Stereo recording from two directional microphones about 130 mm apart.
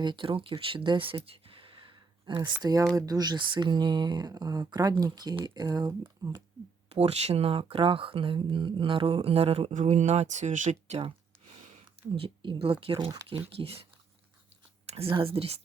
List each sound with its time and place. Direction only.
0.0 s speech: 35° right (ahead or behind)
1.2 s a sound: 45° right (ahead or behind)
2.6 s speech: 30° right (ahead or behind)
6.9 s speech: 55° right (ahead or behind)
9.7 s speech: 65° right (ahead or behind)
12.1 s speech: 40° right (ahead or behind)
14.8 s a sound: 50° right (ahead or behind)
15.1 s speech: 45° right (ahead or behind)